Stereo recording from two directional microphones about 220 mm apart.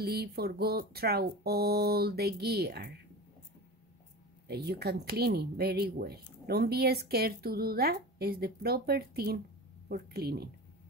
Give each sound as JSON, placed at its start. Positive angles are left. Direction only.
{"t": 0.0, "sound": "speech", "side_deg": -45}
{"t": 4.5, "sound": "speech", "side_deg": -45}